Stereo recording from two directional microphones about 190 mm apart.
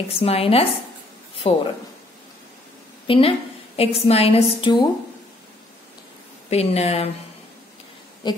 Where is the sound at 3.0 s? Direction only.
30° left (ahead or behind).